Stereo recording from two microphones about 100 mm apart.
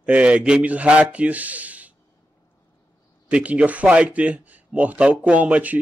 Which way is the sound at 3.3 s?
10° right (ahead or behind).